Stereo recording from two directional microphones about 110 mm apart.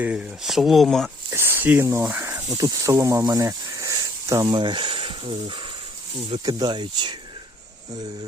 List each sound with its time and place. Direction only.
0.0 s speech: 10° right (ahead or behind)
1.3 s a sound: 20° right (ahead or behind)
2.3 s speech: 35° right (ahead or behind)
4.5 s speech: 45° right (ahead or behind)